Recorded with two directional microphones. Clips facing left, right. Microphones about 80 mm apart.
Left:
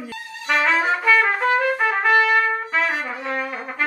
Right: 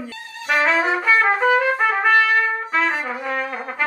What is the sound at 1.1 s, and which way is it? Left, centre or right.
Trumpet, centre.